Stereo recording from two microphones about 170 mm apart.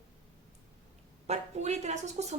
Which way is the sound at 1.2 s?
40° right (ahead or behind).